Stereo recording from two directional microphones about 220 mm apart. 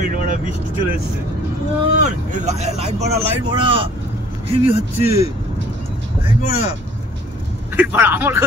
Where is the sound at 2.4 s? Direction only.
30° right (ahead or behind).